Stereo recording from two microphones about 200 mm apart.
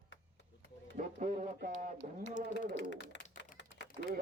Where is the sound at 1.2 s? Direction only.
40° right (ahead or behind).